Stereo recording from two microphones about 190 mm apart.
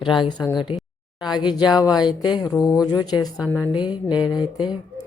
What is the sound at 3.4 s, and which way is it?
Speech, 10° left (ahead or behind).